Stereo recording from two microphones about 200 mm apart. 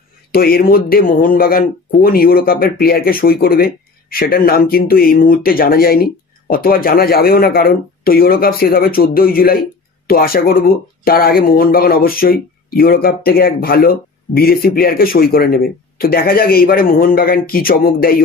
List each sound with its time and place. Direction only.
0.3 s speech: 50° left (ahead or behind)